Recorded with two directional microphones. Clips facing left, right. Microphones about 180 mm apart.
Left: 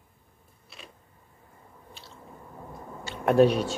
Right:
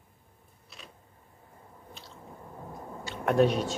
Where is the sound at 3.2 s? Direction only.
5° left (ahead or behind).